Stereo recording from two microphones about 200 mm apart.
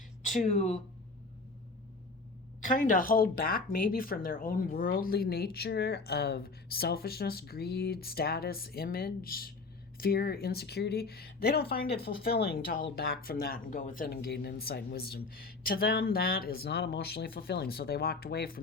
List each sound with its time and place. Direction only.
0.3 s speech: 35° left (ahead or behind)
2.6 s speech: 40° left (ahead or behind)